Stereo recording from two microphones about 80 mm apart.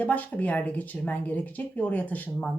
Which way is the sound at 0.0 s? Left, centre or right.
Centre.